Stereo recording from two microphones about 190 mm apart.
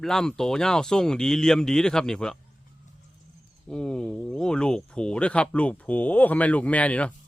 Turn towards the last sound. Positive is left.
turn(degrees=5)  # may be behind; listen again after turning